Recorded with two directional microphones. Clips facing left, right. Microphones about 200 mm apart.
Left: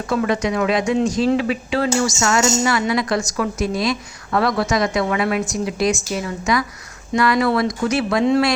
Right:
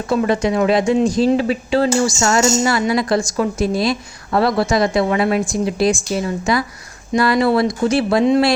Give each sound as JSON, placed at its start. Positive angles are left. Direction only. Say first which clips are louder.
{"t": 0.1, "sound": "speech", "louder": "right 3 dB", "side_deg": -30}